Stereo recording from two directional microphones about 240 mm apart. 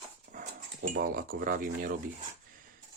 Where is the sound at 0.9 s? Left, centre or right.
Right.